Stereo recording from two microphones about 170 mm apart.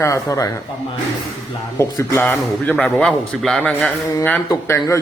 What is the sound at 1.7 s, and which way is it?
A man's voice, 15° left (ahead or behind).